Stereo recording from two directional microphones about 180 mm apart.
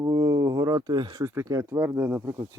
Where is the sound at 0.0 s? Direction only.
20° right (ahead or behind).